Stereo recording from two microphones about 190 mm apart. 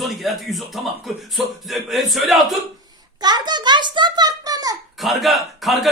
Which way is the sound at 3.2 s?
20° right (ahead or behind).